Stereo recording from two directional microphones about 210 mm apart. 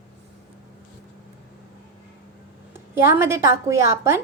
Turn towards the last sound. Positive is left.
turn(degrees=-15)  # may be behind; listen again after turning